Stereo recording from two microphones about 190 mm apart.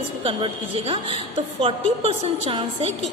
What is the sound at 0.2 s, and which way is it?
Speech, 25° right (ahead or behind).